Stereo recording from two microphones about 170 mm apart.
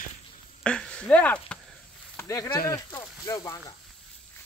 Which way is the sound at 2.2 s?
20° left (ahead or behind).